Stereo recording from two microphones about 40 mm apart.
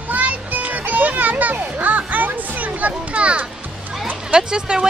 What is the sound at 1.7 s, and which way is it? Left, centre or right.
Children playing, right.